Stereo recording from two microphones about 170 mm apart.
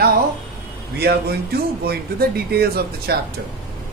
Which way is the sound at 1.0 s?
70° right (ahead or behind).